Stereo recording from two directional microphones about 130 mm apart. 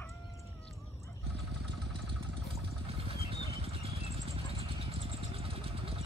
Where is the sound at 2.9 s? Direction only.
45° right (ahead or behind).